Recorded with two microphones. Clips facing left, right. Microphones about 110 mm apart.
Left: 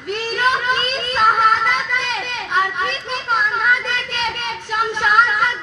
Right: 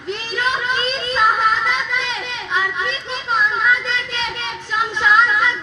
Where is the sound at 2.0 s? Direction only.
50° left (ahead or behind).